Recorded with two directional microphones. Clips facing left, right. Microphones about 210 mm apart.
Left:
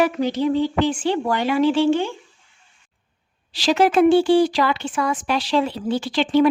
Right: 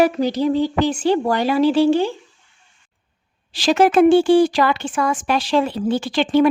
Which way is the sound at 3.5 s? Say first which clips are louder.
Right 2 dB; 50° right (ahead or behind).